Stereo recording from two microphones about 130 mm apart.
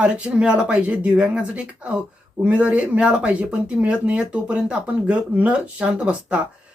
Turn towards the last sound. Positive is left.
turn(degrees=-10)  # may be behind; listen again after turning